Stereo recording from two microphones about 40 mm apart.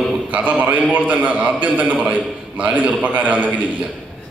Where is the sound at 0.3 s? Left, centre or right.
Right.